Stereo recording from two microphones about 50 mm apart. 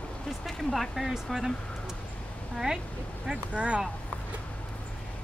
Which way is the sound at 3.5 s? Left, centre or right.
Right.